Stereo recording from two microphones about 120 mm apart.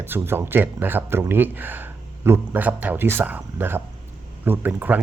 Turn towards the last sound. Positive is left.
turn(degrees=-15)  # may be behind; listen again after turning